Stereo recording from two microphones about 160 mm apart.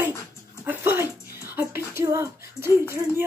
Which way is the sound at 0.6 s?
15° right (ahead or behind).